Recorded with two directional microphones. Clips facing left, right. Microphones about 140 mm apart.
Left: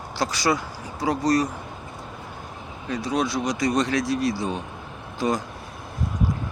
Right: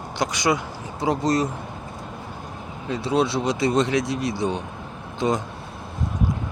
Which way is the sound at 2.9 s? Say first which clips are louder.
Right 3 dB; 25° right (ahead or behind).